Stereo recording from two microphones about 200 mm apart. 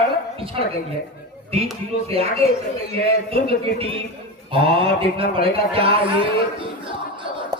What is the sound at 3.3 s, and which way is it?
A man's voice, 30° right (ahead or behind).